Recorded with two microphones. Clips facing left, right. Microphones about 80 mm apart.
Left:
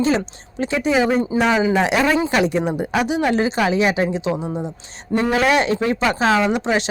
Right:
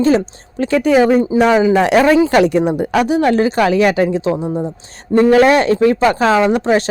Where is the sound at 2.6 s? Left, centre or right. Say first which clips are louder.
Right 6 dB; centre.